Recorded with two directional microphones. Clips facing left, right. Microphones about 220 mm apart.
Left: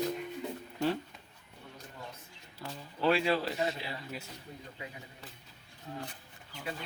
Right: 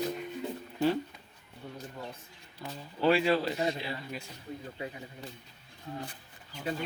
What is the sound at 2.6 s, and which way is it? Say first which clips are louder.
Speech: right 3 dB; centre (ahead or behind).